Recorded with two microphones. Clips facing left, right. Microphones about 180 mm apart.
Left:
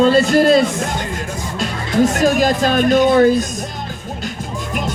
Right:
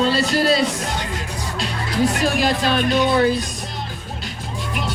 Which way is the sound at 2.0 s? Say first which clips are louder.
Left 6 dB; 45° left (ahead or behind).